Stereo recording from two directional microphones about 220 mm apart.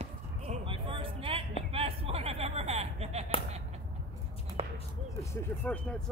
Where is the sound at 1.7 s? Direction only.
25° right (ahead or behind).